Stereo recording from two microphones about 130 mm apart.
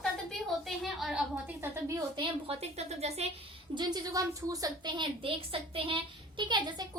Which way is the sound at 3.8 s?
30° right (ahead or behind).